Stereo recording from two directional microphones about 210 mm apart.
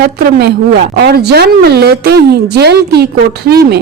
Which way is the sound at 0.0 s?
50° right (ahead or behind).